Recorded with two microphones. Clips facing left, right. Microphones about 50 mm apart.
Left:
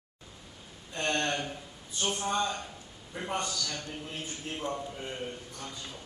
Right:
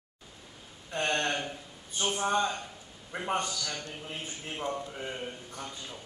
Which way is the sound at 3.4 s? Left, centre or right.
Right.